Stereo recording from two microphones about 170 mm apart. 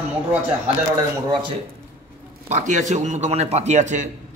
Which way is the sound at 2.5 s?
45° right (ahead or behind).